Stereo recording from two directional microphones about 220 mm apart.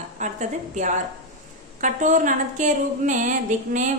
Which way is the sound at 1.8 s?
35° right (ahead or behind).